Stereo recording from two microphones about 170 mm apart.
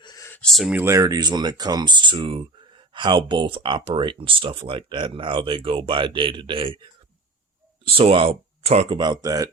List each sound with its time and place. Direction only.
0.0 s a sound: 25° left (ahead or behind)
0.3 s speech: 5° left (ahead or behind); by 6.7 s 30° right (ahead or behind)
7.9 s speech: 35° right (ahead or behind)